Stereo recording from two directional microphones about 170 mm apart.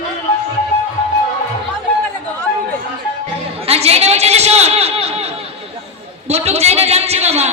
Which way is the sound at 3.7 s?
35° right (ahead or behind).